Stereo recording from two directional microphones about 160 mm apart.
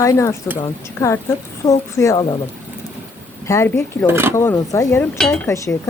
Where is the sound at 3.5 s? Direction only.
15° left (ahead or behind).